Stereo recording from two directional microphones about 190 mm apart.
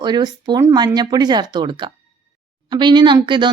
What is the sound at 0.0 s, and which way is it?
Speech, 20° right (ahead or behind).